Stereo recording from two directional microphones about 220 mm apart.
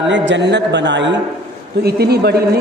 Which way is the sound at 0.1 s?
55° right (ahead or behind).